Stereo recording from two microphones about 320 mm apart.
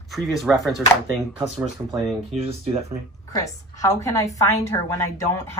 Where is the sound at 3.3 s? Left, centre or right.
Centre.